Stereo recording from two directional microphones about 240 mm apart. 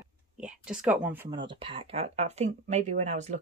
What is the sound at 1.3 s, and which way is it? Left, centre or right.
Speech, right.